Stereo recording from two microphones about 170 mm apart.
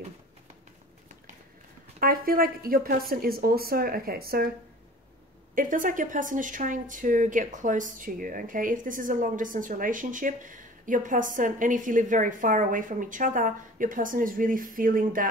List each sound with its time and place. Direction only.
2.0 s a woman's voice: 60° right (ahead or behind)
5.5 s speech: 50° right (ahead or behind)